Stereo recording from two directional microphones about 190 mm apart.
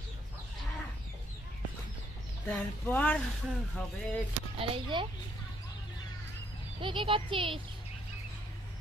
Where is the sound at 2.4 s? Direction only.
10° left (ahead or behind).